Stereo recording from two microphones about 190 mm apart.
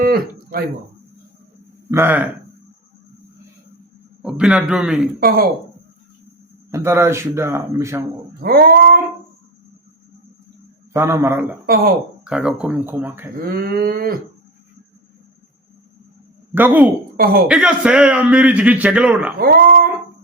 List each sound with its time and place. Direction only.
0.0 s a sound: 50° right (ahead or behind)
1.9 s a man's voice: 10° right (ahead or behind)
4.2 s a man's voice: 5° right (ahead or behind)
6.7 s a man's voice: 15° right (ahead or behind)
8.4 s cattle: 50° right (ahead or behind)
10.9 s a man's voice: 15° right (ahead or behind)
11.6 s cattle: 50° right (ahead or behind)
12.2 s a man's voice: 5° right (ahead or behind)
13.4 s cattle: 55° right (ahead or behind)
16.6 s a man's voice: 10° right (ahead or behind)
19.4 s cattle: 50° right (ahead or behind)